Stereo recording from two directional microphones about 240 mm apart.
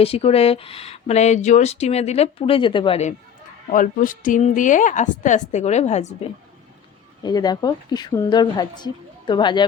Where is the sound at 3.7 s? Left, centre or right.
Left.